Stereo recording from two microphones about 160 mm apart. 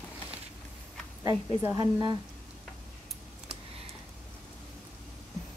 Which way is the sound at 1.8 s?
25° right (ahead or behind).